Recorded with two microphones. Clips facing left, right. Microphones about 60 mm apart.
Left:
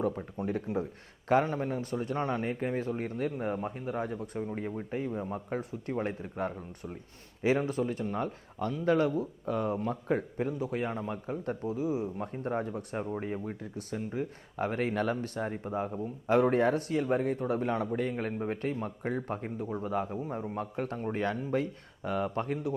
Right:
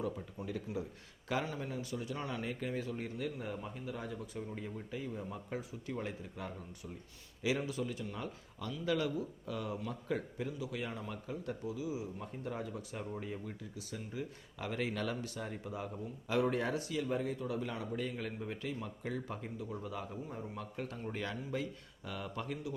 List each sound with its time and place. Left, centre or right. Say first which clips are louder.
0.0 s a man's voice: left 8 dB; left